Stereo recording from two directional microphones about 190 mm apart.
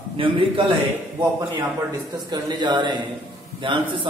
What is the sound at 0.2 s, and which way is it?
Speech, 25° right (ahead or behind).